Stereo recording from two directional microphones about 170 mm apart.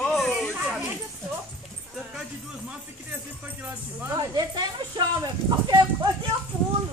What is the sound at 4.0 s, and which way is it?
Speech, 20° right (ahead or behind).